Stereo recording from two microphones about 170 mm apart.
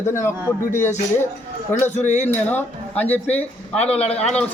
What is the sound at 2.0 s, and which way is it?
Speech, 45° left (ahead or behind).